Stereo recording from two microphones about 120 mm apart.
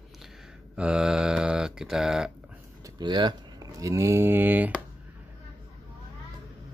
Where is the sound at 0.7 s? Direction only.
5° right (ahead or behind).